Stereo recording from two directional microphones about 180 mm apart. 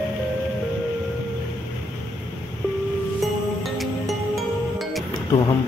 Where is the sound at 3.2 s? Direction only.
Centre (ahead or behind).